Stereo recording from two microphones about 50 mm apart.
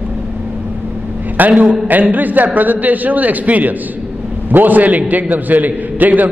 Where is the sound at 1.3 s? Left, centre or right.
Right.